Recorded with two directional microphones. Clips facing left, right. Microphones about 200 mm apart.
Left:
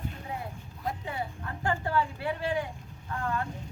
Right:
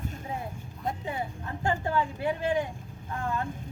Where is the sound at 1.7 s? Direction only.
20° right (ahead or behind).